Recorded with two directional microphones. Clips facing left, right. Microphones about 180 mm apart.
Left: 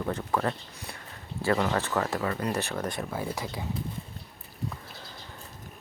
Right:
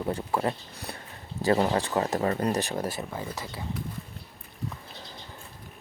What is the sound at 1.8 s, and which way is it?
Speech, 20° right (ahead or behind).